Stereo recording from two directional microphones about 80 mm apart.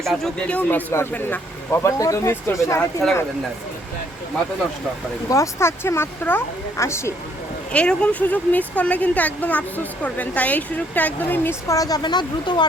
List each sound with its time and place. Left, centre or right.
0.0 s speech: centre; by 0.9 s left
1.7 s speech: left
5.3 s speech: left
7.7 s speech: centre
11.7 s speech: left